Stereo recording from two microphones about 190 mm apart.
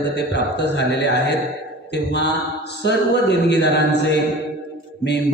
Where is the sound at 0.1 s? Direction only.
65° left (ahead or behind).